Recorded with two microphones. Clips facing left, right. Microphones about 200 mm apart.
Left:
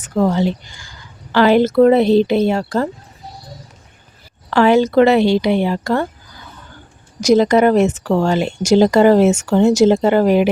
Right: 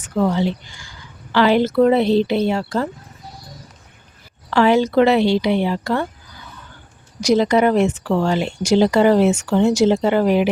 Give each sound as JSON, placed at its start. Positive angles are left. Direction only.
{"t": 0.0, "sound": "speech", "side_deg": 45}
{"t": 4.5, "sound": "speech", "side_deg": 50}
{"t": 7.2, "sound": "speech", "side_deg": 45}